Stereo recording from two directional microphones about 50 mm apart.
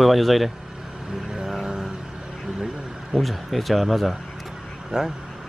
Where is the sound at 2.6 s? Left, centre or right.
Centre.